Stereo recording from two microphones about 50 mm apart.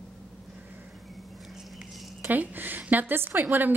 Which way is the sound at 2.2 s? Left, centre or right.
Right.